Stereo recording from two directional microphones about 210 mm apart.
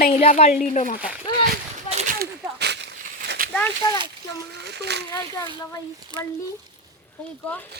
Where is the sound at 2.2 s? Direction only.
50° right (ahead or behind).